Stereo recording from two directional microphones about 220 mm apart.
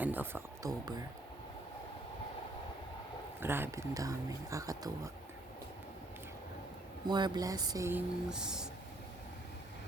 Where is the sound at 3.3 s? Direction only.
10° right (ahead or behind).